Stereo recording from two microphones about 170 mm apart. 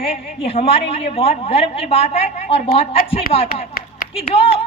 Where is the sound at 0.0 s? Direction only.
35° left (ahead or behind).